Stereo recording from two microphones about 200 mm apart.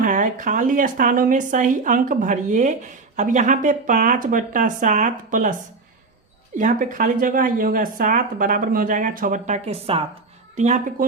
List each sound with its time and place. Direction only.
0.0 s speech: 40° right (ahead or behind)
6.6 s speech: 40° right (ahead or behind)